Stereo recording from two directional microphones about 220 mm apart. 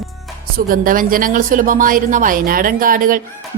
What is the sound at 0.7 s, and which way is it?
Speech, 40° right (ahead or behind).